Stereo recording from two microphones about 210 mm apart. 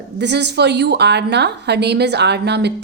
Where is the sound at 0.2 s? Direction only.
55° right (ahead or behind).